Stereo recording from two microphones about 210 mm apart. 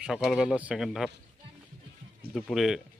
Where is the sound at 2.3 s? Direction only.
Centre (ahead or behind).